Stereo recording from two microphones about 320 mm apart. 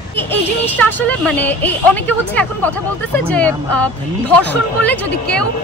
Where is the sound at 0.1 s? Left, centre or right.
Centre.